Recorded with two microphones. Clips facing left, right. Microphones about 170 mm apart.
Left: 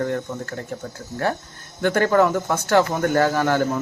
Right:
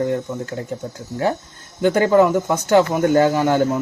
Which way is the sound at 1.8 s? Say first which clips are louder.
Right 3 dB; 15° right (ahead or behind).